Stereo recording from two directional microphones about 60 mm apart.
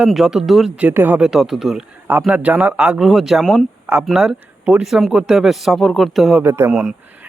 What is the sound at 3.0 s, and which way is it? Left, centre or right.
Speech, centre.